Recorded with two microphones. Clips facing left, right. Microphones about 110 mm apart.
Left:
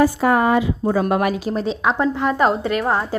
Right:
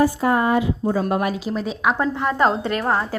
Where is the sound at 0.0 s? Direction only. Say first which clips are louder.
Left 2 dB; 80° left.